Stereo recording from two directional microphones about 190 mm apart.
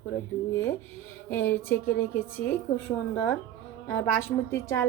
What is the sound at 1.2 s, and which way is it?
Speech, 10° left (ahead or behind).